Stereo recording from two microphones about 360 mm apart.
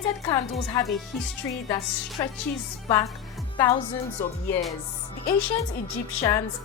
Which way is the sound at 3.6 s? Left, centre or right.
Centre.